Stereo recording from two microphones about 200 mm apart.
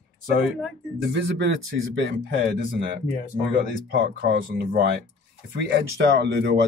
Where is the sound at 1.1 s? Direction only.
60° right (ahead or behind).